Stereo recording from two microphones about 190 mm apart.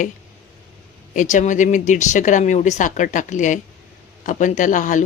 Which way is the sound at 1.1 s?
40° left (ahead or behind).